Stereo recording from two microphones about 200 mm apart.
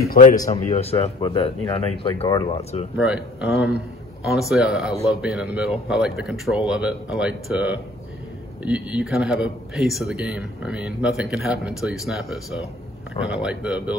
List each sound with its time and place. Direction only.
0.0 s a man's voice: 45° left (ahead or behind)
0.7 s speech: 30° left (ahead or behind)
3.0 s speech: 5° right (ahead or behind)